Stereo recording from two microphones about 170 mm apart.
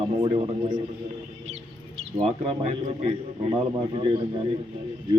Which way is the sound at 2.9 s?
30° right (ahead or behind).